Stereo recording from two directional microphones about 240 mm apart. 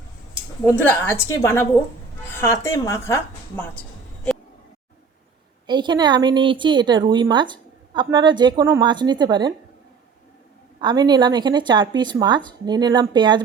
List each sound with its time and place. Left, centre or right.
0.6 s a woman's voice: centre
5.6 s a woman's voice: centre
10.8 s a woman's voice: centre